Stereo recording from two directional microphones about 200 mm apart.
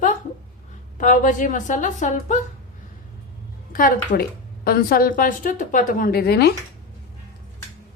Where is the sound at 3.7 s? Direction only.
45° left (ahead or behind).